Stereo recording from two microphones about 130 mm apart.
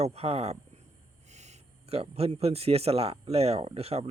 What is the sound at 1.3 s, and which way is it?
Speech, 60° right (ahead or behind).